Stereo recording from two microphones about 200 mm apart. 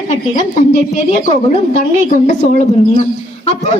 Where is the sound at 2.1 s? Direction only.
40° left (ahead or behind).